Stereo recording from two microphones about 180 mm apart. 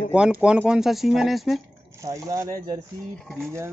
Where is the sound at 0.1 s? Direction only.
5° right (ahead or behind).